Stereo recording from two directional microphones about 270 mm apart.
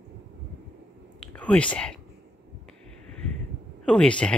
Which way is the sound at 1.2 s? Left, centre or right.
Centre.